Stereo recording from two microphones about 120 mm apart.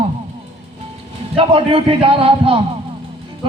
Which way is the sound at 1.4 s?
45° right (ahead or behind).